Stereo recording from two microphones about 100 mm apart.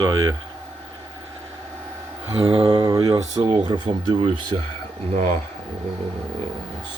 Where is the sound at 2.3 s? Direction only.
70° right (ahead or behind).